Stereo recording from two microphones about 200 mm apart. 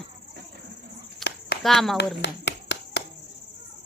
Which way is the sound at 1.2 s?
Centre (ahead or behind).